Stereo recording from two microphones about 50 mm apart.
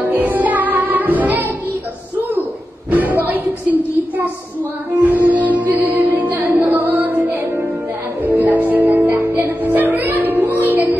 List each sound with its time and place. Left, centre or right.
0.1 s music: right
2.9 s music: right